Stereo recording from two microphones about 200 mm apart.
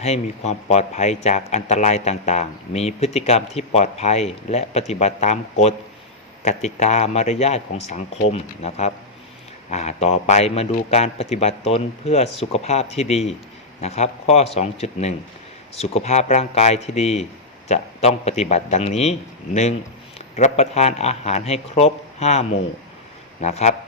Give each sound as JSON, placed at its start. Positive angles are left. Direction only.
{"t": 0.0, "sound": "speech", "side_deg": 35}
{"t": 20.3, "sound": "speech", "side_deg": 35}